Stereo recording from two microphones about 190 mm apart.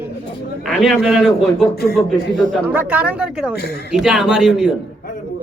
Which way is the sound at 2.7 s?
10° right (ahead or behind).